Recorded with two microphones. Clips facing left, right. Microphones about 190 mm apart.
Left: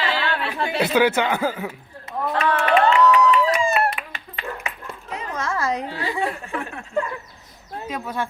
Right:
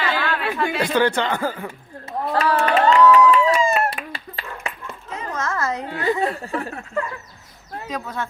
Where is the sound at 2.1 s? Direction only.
35° right (ahead or behind).